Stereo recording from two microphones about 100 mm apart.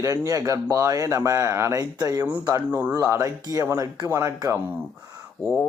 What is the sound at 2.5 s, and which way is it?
Speech, 20° right (ahead or behind).